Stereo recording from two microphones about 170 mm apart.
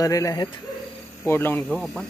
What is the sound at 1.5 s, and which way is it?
Speech, 5° left (ahead or behind).